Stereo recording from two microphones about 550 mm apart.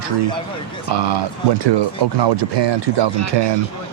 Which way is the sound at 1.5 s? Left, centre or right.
Right.